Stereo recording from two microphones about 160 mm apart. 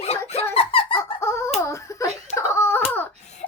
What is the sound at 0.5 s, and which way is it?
Giggle, 35° left (ahead or behind).